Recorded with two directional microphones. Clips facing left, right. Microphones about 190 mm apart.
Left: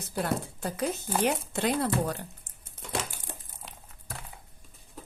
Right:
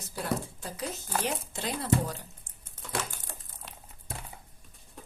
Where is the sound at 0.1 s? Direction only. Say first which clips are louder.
Left 2 dB; 60° left (ahead or behind).